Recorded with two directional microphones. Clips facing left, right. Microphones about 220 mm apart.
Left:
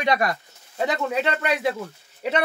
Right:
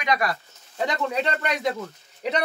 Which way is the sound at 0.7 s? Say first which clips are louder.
Left 2 dB; 5° left (ahead or behind).